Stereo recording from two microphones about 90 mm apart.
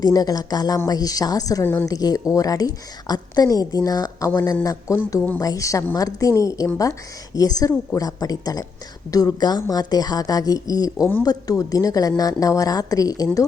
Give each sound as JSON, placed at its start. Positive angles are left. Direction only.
{"t": 0.0, "sound": "a woman's voice", "side_deg": 45}
{"t": 1.6, "sound": "a woman's voice", "side_deg": 25}
{"t": 1.9, "sound": "a woman's voice", "side_deg": 45}